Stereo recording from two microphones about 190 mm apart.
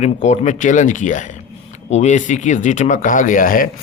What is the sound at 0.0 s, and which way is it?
A man's voice, 40° left (ahead or behind).